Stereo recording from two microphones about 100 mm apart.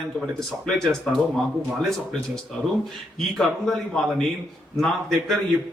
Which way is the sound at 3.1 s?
5° left (ahead or behind).